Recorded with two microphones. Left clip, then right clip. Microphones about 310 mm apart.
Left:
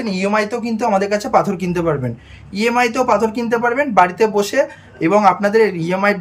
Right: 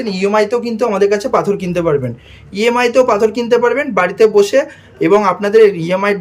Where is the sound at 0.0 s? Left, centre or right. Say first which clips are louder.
Right 4 dB; centre.